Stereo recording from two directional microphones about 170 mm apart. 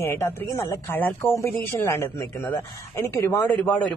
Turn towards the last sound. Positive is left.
turn(degrees=10)  # may be behind; listen again after turning